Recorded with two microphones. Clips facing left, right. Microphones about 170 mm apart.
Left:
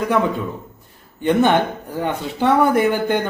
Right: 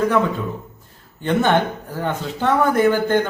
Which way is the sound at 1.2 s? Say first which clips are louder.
Left 2 dB; 15° left (ahead or behind).